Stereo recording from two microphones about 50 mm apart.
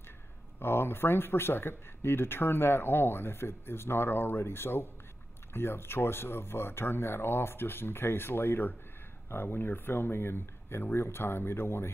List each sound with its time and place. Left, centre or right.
0.6 s speech: left